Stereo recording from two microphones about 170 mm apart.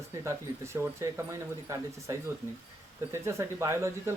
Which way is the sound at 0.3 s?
15° right (ahead or behind).